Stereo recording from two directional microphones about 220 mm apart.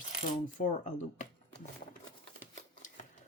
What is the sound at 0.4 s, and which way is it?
Speech, 35° left (ahead or behind).